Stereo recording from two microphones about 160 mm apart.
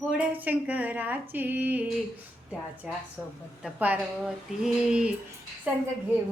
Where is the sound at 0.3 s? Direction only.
10° right (ahead or behind).